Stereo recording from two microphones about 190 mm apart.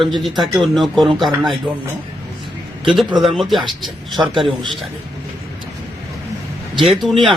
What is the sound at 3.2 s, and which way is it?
Speech, centre (ahead or behind).